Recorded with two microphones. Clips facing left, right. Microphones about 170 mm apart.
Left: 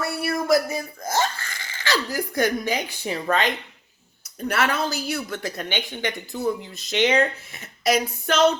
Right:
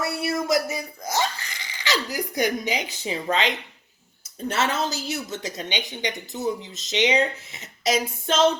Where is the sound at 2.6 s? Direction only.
50° left (ahead or behind).